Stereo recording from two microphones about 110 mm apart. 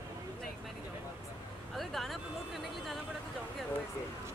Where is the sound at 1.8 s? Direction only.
Centre (ahead or behind).